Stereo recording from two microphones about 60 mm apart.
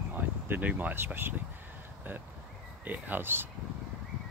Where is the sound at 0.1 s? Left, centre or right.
Right.